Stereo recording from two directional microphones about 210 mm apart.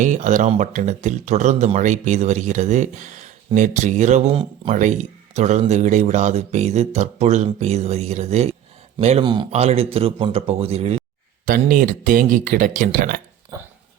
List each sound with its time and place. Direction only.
0.0 s speech: 35° right (ahead or behind)
11.4 s speech: 40° right (ahead or behind)